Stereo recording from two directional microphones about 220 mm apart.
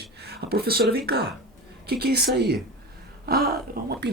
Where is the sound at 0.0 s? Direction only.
45° right (ahead or behind).